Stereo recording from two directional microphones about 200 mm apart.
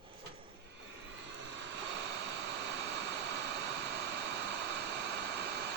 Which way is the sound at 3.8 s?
60° right (ahead or behind).